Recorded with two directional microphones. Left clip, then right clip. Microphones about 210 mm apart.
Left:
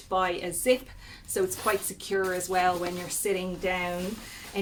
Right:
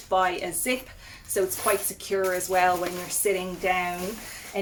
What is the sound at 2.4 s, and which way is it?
Speech, 20° left (ahead or behind).